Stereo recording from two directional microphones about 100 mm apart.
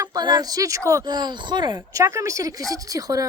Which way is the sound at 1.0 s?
45° right (ahead or behind).